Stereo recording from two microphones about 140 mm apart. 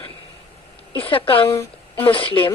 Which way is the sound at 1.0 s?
40° left (ahead or behind).